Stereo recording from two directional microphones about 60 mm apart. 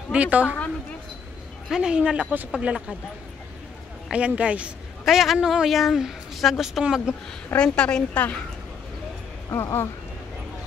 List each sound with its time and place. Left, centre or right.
0.1 s speech: right
1.7 s speech: centre
4.1 s speech: right
5.0 s speech: centre
7.5 s a woman's voice: centre
9.5 s speech: left